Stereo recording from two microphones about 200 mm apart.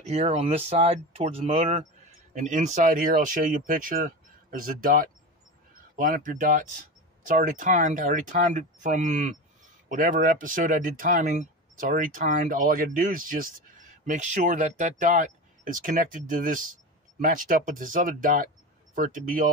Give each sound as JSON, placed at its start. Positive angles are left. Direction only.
{"t": 0.0, "sound": "speech", "side_deg": -30}